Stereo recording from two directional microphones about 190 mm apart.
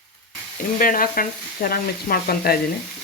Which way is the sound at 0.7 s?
45° left (ahead or behind).